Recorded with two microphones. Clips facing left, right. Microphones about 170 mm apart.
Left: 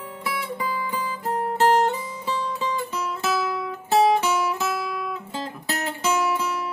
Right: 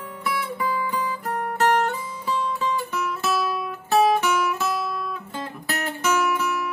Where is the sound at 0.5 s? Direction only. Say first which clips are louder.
Right 2 dB; 25° left (ahead or behind).